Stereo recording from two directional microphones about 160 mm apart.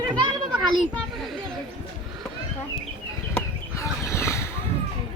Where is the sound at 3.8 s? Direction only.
15° left (ahead or behind).